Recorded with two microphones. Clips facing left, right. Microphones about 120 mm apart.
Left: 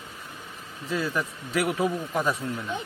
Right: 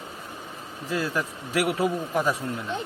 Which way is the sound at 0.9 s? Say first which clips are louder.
Right 1 dB; centre (ahead or behind).